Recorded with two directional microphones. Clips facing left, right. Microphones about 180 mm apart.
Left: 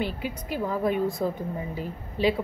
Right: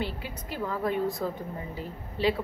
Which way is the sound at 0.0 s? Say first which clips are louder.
Left 4 dB; 15° left (ahead or behind).